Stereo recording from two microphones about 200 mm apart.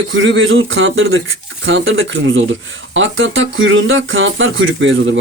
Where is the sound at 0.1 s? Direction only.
70° right (ahead or behind).